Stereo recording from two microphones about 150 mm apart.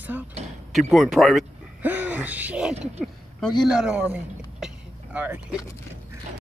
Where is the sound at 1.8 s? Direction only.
10° right (ahead or behind).